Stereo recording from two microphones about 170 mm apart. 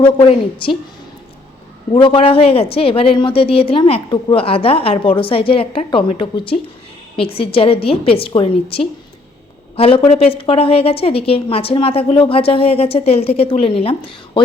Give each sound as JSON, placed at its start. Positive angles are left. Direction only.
{"t": 0.0, "sound": "a woman's voice", "side_deg": 35}
{"t": 1.9, "sound": "a woman's voice", "side_deg": 30}